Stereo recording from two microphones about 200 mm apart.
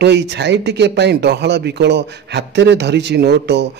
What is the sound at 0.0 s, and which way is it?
Speech, 60° right (ahead or behind).